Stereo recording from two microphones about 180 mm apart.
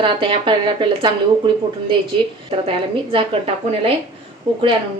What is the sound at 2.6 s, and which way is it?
A woman's voice, 30° right (ahead or behind).